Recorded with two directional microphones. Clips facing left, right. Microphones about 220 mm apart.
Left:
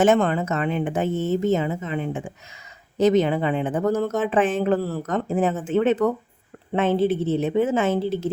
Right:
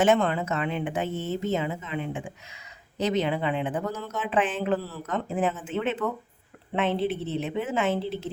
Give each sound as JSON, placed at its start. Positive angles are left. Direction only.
{"t": 0.0, "sound": "a woman's voice", "side_deg": 45}